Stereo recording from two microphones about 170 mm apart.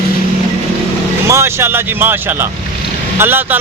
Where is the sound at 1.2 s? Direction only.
15° right (ahead or behind).